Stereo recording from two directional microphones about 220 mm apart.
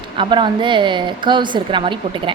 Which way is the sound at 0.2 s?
20° right (ahead or behind).